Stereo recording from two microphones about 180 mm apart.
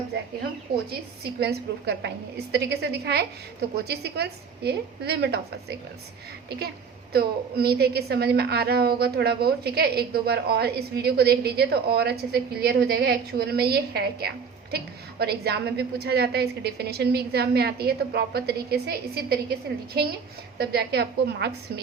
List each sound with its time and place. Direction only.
0.9 s a woman's voice: 60° right (ahead or behind)
7.1 s a woman's voice: 60° right (ahead or behind)